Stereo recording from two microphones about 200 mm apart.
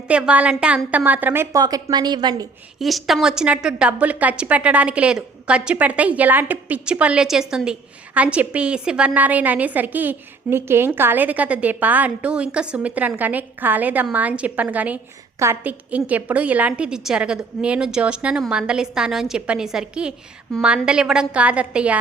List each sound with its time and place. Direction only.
0.1 s a woman's voice: 5° right (ahead or behind)
2.7 s a woman's voice: centre (ahead or behind)